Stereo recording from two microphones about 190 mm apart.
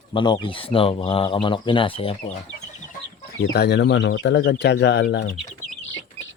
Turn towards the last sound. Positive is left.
turn(degrees=55)  # may be behind; listen again after turning